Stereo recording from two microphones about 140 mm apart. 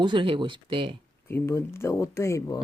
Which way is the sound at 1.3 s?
15° left (ahead or behind).